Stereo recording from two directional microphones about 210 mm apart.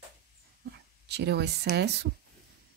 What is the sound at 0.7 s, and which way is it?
Speech, 50° right (ahead or behind).